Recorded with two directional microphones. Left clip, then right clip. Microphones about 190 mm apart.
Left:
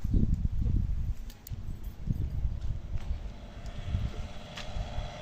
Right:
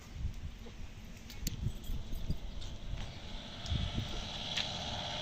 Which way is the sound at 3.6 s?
20° left (ahead or behind).